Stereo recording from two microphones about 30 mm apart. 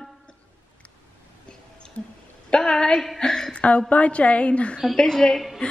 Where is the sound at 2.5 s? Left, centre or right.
Left.